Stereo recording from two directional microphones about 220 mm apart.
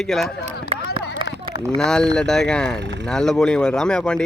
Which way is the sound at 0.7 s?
25° right (ahead or behind).